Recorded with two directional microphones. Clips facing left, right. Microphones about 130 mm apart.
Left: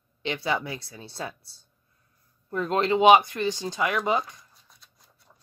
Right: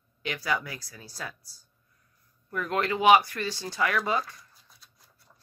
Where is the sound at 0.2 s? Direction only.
25° left (ahead or behind).